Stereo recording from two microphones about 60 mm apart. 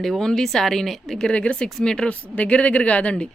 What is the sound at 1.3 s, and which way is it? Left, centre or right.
Speech, centre.